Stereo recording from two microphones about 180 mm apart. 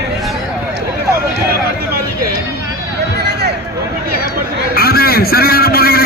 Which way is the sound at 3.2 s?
65° right (ahead or behind).